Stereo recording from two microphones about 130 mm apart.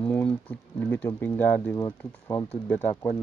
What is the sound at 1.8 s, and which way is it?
Speech, 30° left (ahead or behind).